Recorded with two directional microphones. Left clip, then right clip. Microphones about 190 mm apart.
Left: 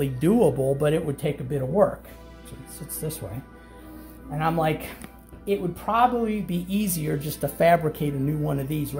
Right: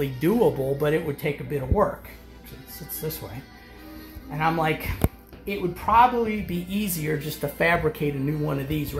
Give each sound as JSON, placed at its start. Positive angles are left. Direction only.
{"t": 0.0, "sound": "speech", "side_deg": 45}
{"t": 4.4, "sound": "speech", "side_deg": 45}